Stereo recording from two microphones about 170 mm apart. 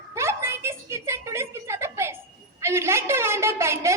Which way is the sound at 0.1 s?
15° right (ahead or behind).